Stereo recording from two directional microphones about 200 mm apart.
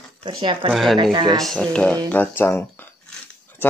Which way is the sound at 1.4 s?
5° left (ahead or behind).